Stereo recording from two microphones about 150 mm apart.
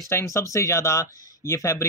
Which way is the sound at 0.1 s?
20° left (ahead or behind).